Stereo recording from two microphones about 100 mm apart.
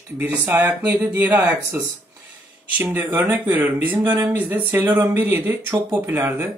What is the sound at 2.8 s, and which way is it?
Speech, 20° right (ahead or behind).